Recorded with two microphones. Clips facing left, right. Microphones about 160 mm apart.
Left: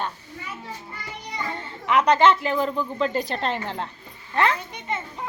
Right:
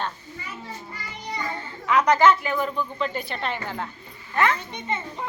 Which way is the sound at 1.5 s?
25° left (ahead or behind).